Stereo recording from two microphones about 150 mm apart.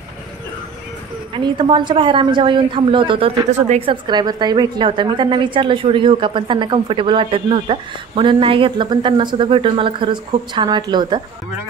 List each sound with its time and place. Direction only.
1.3 s a woman's voice: 30° right (ahead or behind)
3.9 s a woman's voice: 30° right (ahead or behind)